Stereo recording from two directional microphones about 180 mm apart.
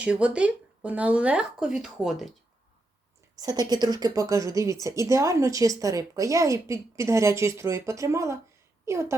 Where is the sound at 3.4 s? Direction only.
20° right (ahead or behind).